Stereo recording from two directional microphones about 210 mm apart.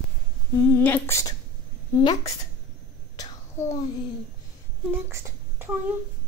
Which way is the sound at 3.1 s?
20° left (ahead or behind).